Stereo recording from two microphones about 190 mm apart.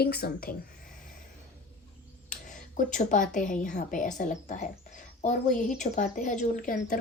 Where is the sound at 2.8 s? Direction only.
40° left (ahead or behind).